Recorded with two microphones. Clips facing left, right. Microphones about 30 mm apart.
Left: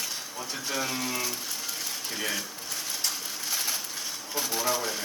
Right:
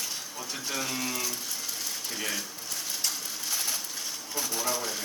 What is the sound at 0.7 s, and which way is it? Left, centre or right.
Speech, centre.